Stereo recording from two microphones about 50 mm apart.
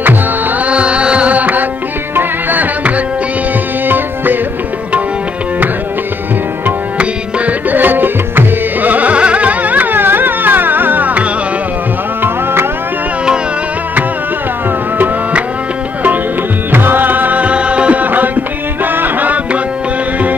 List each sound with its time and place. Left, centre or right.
0.7 s music: right
2.1 s tabla: right
3.8 s music: right
7.0 s music: right
7.7 s music: right
16.7 s music: right